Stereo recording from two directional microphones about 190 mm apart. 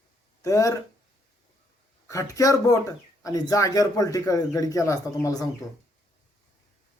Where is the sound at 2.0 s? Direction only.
15° left (ahead or behind).